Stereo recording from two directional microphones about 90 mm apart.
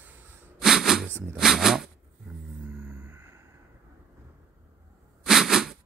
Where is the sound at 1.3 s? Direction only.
5° right (ahead or behind).